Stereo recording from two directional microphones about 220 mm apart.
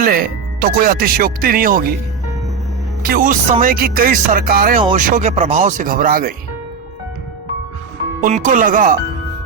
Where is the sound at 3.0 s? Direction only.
40° right (ahead or behind).